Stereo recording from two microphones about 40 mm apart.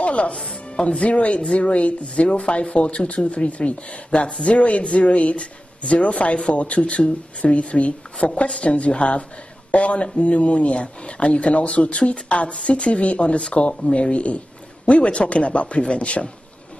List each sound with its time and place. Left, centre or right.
0.0 s chopping: left
0.4 s chopping: centre
0.8 s speech: left